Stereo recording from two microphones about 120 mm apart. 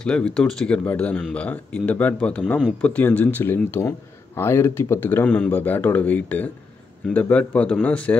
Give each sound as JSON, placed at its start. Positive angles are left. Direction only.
{"t": 0.0, "sound": "speech", "side_deg": 5}